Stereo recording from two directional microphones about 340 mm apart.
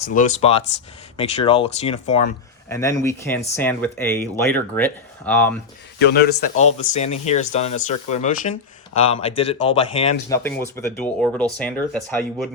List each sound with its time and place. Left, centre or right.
0.0 s speech: left
2.6 s speech: centre
6.0 s speech: left; by 11.7 s centre